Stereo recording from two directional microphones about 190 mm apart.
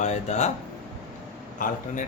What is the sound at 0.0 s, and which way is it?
Speech, 40° left (ahead or behind).